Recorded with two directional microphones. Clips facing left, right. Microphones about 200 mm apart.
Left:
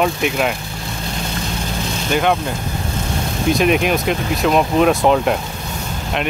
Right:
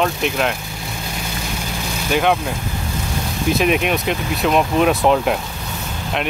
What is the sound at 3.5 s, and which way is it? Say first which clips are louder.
Speech: left 2 dB; centre (ahead or behind).